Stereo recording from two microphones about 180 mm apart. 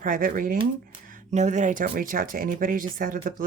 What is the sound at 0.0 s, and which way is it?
Speech, 50° right (ahead or behind).